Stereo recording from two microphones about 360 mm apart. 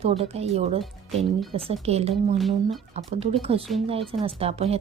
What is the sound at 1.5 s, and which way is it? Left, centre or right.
Speech, centre.